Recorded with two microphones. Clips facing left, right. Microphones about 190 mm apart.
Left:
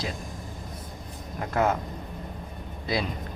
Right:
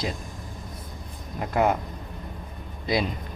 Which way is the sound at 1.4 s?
15° right (ahead or behind).